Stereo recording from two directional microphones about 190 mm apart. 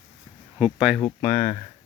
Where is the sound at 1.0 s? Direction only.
15° left (ahead or behind).